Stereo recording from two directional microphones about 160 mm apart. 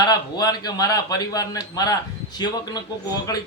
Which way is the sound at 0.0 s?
25° left (ahead or behind).